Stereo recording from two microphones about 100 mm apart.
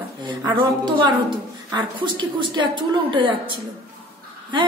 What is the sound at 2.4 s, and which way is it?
Speech, 50° right (ahead or behind).